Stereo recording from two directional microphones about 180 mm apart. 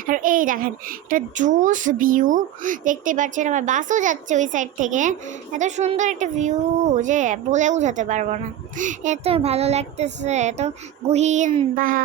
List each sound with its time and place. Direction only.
0.0 s a woman's voice: 50° right (ahead or behind)